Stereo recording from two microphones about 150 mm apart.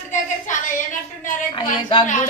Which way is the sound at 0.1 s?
55° left (ahead or behind).